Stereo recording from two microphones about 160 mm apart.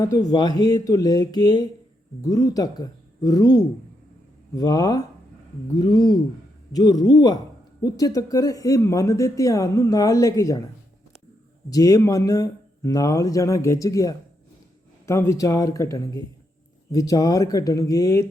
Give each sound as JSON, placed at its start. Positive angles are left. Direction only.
{"t": 0.0, "sound": "speech", "side_deg": 25}
{"t": 11.7, "sound": "speech", "side_deg": 20}